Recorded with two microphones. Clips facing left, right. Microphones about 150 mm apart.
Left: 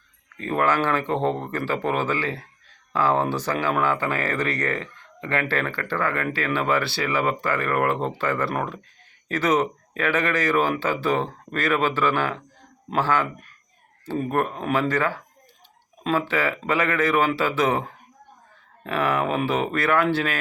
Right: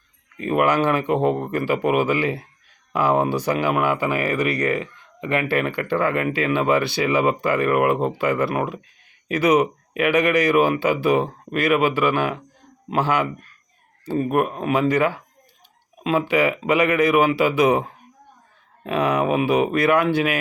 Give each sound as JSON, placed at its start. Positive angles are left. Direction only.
{"t": 0.3, "sound": "speech", "side_deg": -15}
{"t": 14.3, "sound": "speech", "side_deg": -15}